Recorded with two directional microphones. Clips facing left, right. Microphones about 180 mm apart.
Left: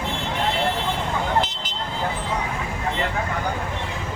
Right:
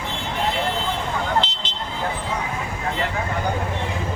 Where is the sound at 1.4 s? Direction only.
30° right (ahead or behind).